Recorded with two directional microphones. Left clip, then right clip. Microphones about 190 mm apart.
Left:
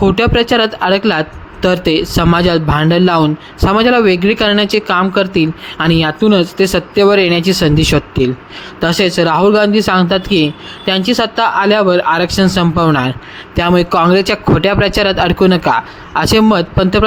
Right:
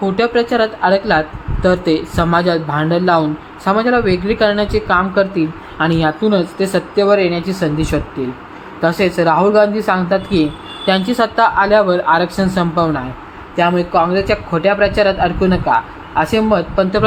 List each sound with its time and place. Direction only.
0.0 s speech: 35° left (ahead or behind)